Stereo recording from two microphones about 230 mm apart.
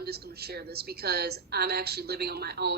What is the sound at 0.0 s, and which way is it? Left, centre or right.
A woman's voice, right.